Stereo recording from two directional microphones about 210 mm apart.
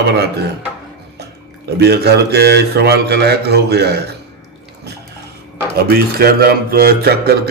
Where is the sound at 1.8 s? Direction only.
50° right (ahead or behind).